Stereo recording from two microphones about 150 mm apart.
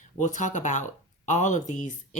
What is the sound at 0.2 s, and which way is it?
Speech, 55° left (ahead or behind).